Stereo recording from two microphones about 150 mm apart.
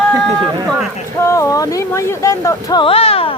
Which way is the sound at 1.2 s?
20° left (ahead or behind).